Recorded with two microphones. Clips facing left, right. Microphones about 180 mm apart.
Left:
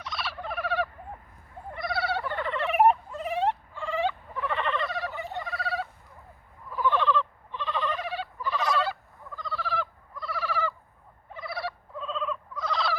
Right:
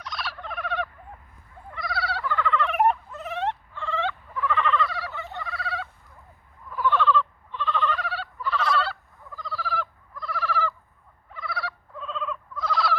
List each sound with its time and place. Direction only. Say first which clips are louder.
0.0 s turkey: even; 5° left (ahead or behind)
1.9 s a sound: even; 25° left (ahead or behind)
2.6 s a sound: left 5 dB; 10° left (ahead or behind)
4.4 s frog: right 7 dB; 30° left (ahead or behind)
5.6 s fowl: left 2 dB; 35° left (ahead or behind)
6.7 s fowl: right 2 dB; 20° left (ahead or behind)
9.3 s fowl: right 1 dB; centre (ahead or behind)
11.3 s fowl: even; 25° left (ahead or behind)
11.9 s a sound: even; centre (ahead or behind)